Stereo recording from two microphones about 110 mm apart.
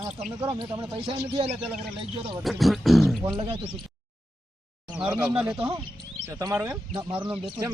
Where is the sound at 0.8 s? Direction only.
50° right (ahead or behind).